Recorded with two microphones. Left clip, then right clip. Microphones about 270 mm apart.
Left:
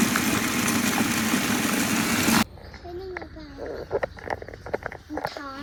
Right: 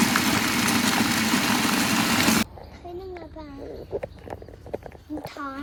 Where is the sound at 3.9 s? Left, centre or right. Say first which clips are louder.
Left 6 dB; right.